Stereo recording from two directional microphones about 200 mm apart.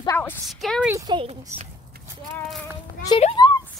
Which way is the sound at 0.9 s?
20° right (ahead or behind).